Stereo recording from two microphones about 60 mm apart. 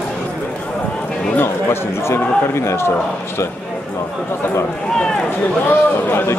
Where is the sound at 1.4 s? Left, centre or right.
Left.